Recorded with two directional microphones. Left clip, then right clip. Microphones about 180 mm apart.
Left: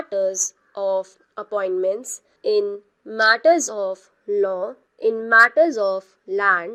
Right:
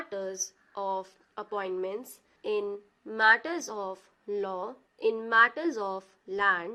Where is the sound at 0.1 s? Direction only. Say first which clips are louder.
Left 16 dB; 30° left (ahead or behind).